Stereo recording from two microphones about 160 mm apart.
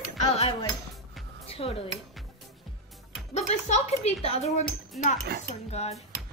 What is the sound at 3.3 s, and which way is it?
Speech, 45° left (ahead or behind).